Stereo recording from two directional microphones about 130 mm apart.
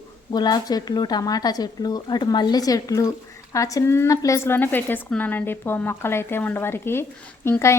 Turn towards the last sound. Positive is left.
turn(degrees=20)  # may be behind; listen again after turning